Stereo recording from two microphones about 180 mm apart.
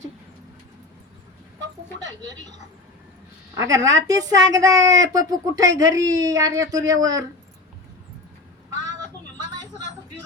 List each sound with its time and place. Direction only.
2.0 s speech: 20° right (ahead or behind)
3.5 s speech: 20° right (ahead or behind)